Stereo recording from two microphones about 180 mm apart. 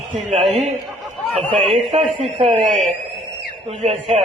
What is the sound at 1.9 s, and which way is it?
A man's voice, 35° right (ahead or behind).